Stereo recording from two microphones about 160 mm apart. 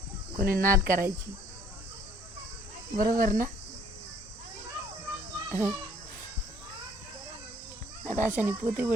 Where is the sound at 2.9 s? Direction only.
55° right (ahead or behind).